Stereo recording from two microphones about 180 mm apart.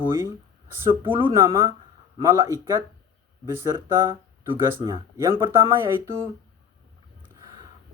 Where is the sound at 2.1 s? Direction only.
20° right (ahead or behind).